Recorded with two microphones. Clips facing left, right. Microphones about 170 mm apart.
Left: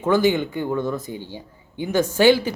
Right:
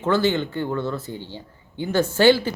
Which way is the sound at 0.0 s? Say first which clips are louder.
Left 2 dB; 10° left (ahead or behind).